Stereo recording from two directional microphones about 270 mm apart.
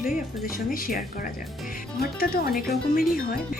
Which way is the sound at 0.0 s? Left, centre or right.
Left.